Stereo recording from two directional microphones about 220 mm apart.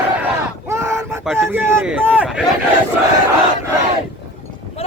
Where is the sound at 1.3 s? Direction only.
10° right (ahead or behind).